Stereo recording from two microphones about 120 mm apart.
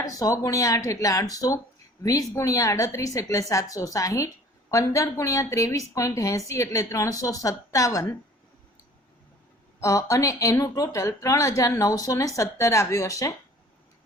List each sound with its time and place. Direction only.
0.0 s a woman's voice: 30° left (ahead or behind)
9.8 s a woman's voice: 30° left (ahead or behind)